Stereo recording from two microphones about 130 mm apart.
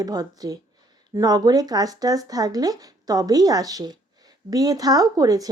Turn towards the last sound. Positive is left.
turn(degrees=-30)  # may be behind; listen again after turning